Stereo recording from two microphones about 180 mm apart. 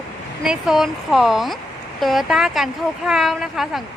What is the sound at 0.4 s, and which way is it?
A woman's voice, centre (ahead or behind).